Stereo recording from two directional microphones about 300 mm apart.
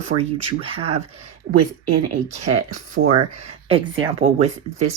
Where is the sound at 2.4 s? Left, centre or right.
Right.